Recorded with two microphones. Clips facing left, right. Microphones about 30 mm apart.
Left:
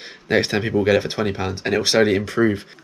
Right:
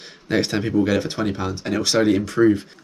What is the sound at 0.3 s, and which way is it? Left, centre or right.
Speech, left.